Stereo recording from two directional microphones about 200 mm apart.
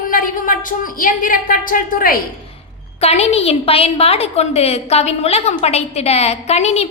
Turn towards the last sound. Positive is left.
turn(degrees=30)  # may be behind; listen again after turning